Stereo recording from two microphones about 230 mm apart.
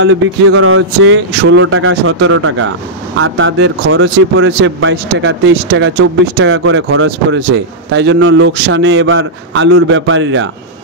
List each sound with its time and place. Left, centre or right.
0.0 s speech: right